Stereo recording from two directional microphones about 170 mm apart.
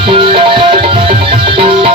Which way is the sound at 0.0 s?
30° right (ahead or behind).